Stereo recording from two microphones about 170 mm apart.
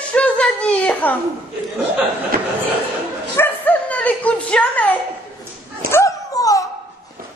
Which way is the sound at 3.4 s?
10° left (ahead or behind).